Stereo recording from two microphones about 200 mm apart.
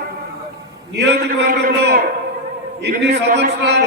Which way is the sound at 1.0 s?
55° right (ahead or behind).